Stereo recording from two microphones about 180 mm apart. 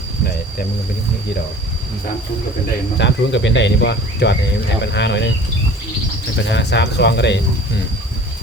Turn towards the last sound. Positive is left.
turn(degrees=75)  # may be behind; listen again after turning